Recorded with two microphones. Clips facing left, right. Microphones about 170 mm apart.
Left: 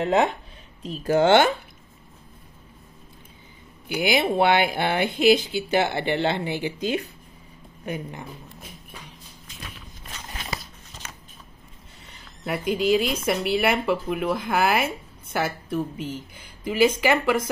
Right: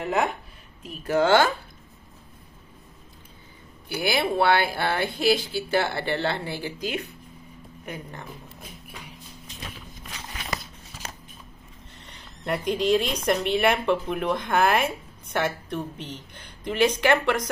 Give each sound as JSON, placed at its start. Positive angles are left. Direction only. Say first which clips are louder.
{"t": 0.0, "sound": "speech", "louder": "left 4 dB", "side_deg": 20}
{"t": 3.9, "sound": "speech", "louder": "left 3 dB", "side_deg": 15}
{"t": 11.0, "sound": "scissors", "louder": "right 4 dB", "side_deg": -35}
{"t": 12.0, "sound": "a woman's voice", "louder": "left 2 dB", "side_deg": 5}